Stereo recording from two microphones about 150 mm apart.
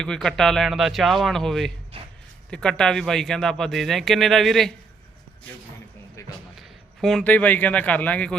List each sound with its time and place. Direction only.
0.0 s speech: 5° left (ahead or behind)
1.9 s speech: 40° right (ahead or behind)
2.5 s speech: 5° left (ahead or behind)
6.2 s a sound: 20° left (ahead or behind)
6.6 s speech: centre (ahead or behind)